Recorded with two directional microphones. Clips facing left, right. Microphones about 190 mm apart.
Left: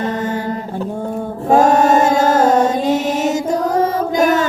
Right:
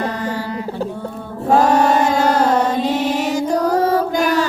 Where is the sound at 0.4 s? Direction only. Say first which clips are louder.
Left 1 dB; 45° left (ahead or behind).